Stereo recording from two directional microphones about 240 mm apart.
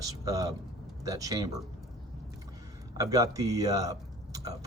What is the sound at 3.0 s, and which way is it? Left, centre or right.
Speech, centre.